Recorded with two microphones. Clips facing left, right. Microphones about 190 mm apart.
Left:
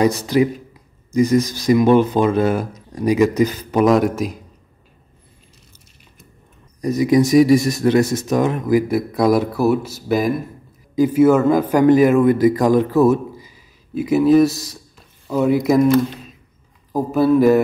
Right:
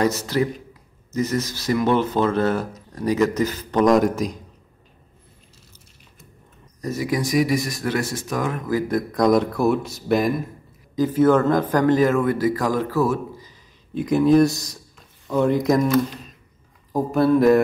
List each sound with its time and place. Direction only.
0.0 s a man's voice: 15° left (ahead or behind)
6.8 s a man's voice: 15° left (ahead or behind)
16.9 s speech: centre (ahead or behind)